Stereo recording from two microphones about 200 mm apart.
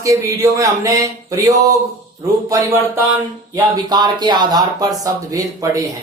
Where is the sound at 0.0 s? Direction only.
15° right (ahead or behind).